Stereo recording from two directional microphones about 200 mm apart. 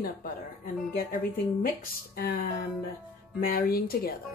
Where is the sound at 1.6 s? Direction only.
45° left (ahead or behind).